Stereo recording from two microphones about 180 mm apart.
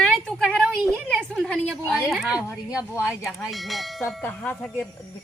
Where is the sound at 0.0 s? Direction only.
5° left (ahead or behind).